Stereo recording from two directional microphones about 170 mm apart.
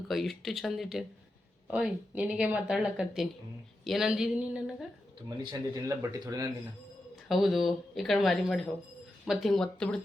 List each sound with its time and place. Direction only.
0.1 s speech: centre (ahead or behind)
5.4 s a man's voice: 20° right (ahead or behind)
7.3 s speech: centre (ahead or behind)